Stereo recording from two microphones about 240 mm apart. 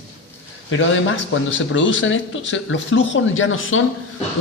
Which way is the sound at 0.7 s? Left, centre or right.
Left.